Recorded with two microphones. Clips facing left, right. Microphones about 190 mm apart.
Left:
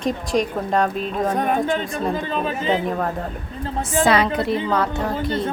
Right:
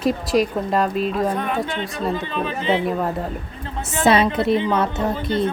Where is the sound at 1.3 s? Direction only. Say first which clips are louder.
Left 3 dB; 45° left (ahead or behind).